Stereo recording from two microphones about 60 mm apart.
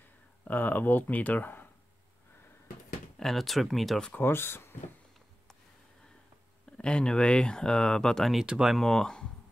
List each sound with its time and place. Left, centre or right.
0.5 s speech: left
3.2 s speech: centre
4.2 s speech: left
6.8 s speech: centre
8.4 s speech: centre
8.7 s speech: centre